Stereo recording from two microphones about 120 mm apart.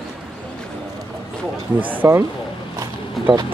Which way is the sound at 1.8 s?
20° right (ahead or behind).